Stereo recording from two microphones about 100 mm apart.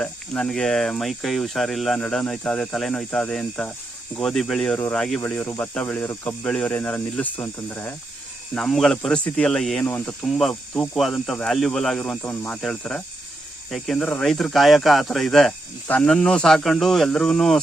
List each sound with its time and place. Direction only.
0.0 s speech: 5° left (ahead or behind)
5.2 s speech: 15° left (ahead or behind)
8.5 s speech: 5° left (ahead or behind)
9.8 s speech: 20° left (ahead or behind)
10.2 s speech: centre (ahead or behind); by 12.5 s 20° left (ahead or behind)
12.5 s speech: 5° left (ahead or behind)
13.9 s speech: 15° left (ahead or behind)
14.3 s speech: centre (ahead or behind)